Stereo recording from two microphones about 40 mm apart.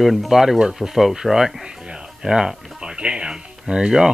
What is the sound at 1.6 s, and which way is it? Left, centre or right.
Music, centre.